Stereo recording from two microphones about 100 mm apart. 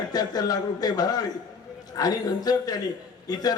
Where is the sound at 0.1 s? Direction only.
40° left (ahead or behind).